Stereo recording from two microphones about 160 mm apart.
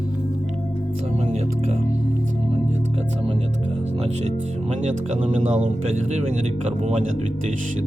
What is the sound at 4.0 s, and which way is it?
Speech, 45° right (ahead or behind).